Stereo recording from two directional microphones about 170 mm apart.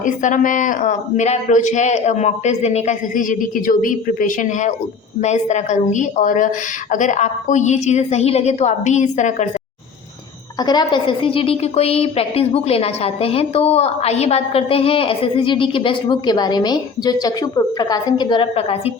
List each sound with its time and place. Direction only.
0.0 s speech: 50° left (ahead or behind)
10.6 s a woman's voice: 25° left (ahead or behind)